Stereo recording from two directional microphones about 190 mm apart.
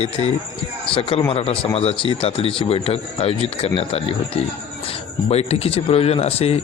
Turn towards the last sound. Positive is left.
turn(degrees=35)  # may be behind; listen again after turning